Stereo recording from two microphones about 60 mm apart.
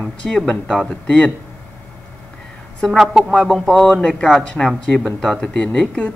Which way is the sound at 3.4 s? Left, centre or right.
Centre.